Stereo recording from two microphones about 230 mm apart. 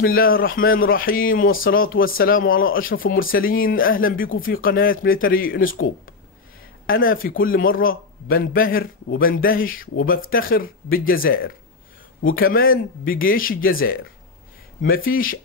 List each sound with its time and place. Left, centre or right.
0.0 s a man's voice: left
6.9 s a man's voice: left
15.0 s a man's voice: left